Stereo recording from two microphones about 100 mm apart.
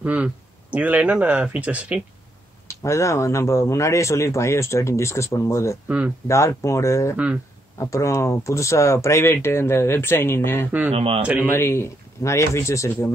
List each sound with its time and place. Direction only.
0.0 s speech: 10° right (ahead or behind)
2.7 s speech: 30° left (ahead or behind)
5.9 s speech: 15° right (ahead or behind)
6.2 s speech: 30° left (ahead or behind)
10.9 s speech: 75° right (ahead or behind)
11.4 s speech: 25° left (ahead or behind)